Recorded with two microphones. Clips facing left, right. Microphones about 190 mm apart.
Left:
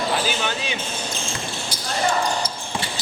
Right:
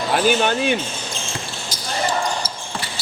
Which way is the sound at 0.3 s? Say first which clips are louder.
Right 8 dB; 55° right (ahead or behind).